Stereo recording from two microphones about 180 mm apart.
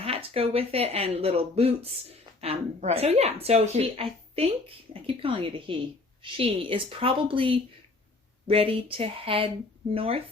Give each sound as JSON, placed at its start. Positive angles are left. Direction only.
{"t": 0.0, "sound": "speech", "side_deg": -30}